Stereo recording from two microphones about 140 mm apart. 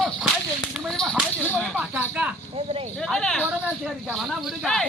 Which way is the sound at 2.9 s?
5° left (ahead or behind).